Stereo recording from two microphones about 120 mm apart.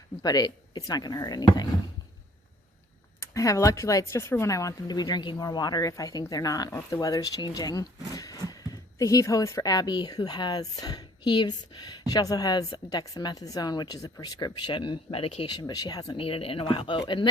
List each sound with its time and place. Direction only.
0.2 s speech: 35° left (ahead or behind)
3.2 s speech: 25° left (ahead or behind); by 15.4 s 50° left (ahead or behind)
15.4 s speech: 35° left (ahead or behind)
16.1 s speech: 50° left (ahead or behind)